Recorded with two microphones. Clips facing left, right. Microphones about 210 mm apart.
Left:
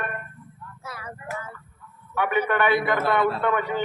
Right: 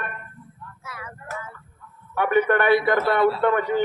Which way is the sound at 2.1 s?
45° right (ahead or behind).